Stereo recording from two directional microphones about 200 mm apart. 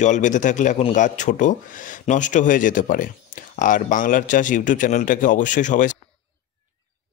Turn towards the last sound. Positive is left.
turn(degrees=40)  # may be behind; listen again after turning